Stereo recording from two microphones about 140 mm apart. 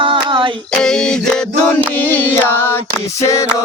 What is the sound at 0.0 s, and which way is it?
Female singing, 35° right (ahead or behind).